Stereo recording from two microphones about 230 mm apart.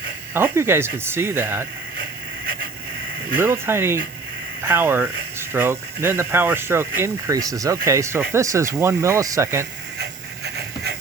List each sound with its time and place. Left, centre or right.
0.3 s speech: centre
3.3 s speech: centre
10.0 s a sound: right